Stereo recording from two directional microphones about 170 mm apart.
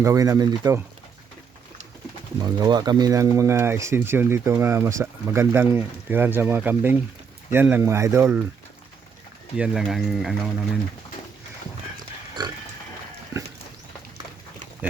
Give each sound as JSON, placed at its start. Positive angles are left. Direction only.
{"t": 0.0, "sound": "speech", "side_deg": -20}
{"t": 2.4, "sound": "speech", "side_deg": -25}
{"t": 9.6, "sound": "speech", "side_deg": -5}